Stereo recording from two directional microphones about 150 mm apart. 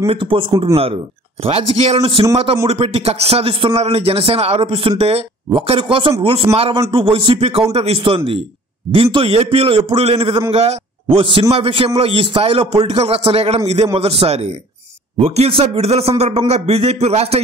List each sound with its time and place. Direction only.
0.0 s a man's voice: 35° right (ahead or behind)